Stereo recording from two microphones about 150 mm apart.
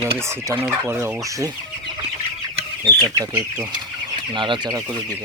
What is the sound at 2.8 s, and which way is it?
Speech, 25° right (ahead or behind).